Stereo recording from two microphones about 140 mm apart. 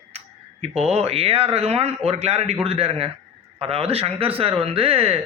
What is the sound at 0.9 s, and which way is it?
A man's voice, 45° right (ahead or behind).